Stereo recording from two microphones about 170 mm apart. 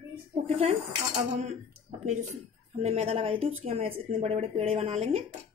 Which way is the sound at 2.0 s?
45° right (ahead or behind).